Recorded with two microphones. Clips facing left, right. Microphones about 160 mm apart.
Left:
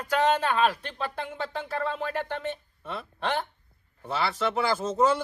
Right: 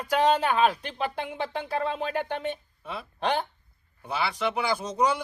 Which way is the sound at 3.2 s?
15° right (ahead or behind).